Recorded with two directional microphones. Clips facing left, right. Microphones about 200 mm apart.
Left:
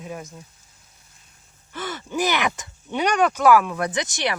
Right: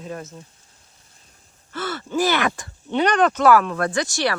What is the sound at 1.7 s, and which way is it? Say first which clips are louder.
Speech: right 3 dB; 15° left (ahead or behind).